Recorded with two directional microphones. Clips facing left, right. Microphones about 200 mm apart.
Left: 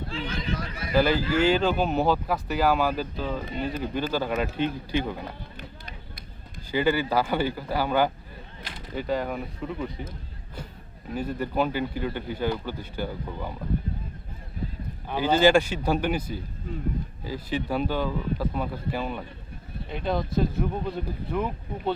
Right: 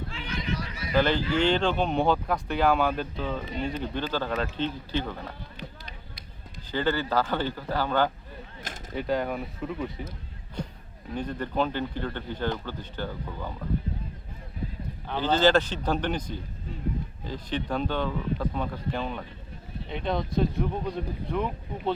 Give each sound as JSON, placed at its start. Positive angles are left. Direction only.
{"t": 0.1, "sound": "a sound", "side_deg": 35}
{"t": 0.5, "sound": "run", "side_deg": 55}
{"t": 0.9, "sound": "speech", "side_deg": 5}
{"t": 6.7, "sound": "speech", "side_deg": 10}
{"t": 9.0, "sound": "speech", "side_deg": 0}
{"t": 11.1, "sound": "speech", "side_deg": 5}
{"t": 15.0, "sound": "speech", "side_deg": 10}